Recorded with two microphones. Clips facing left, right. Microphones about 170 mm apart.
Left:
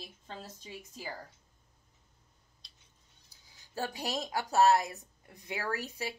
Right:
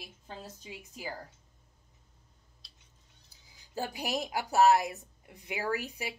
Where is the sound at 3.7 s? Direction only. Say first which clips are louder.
Right 1 dB; 15° right (ahead or behind).